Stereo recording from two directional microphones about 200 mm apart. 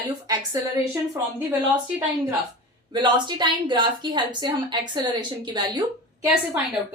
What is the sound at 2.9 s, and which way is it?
A woman's voice, 25° right (ahead or behind).